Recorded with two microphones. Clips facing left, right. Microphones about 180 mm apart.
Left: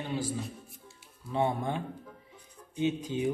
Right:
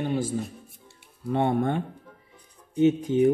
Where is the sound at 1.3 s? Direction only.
60° right (ahead or behind).